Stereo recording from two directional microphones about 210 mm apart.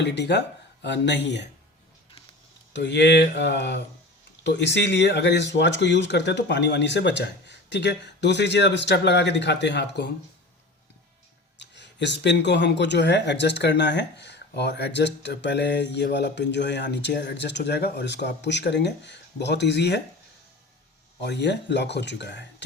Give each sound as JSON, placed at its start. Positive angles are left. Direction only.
{"t": 0.0, "sound": "speech", "side_deg": 55}
{"t": 2.7, "sound": "speech", "side_deg": 55}
{"t": 11.6, "sound": "speech", "side_deg": 55}
{"t": 21.2, "sound": "speech", "side_deg": 55}